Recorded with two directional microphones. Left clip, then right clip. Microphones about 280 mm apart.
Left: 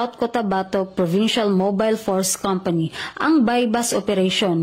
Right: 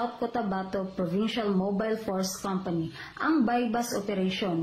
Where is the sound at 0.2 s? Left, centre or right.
Left.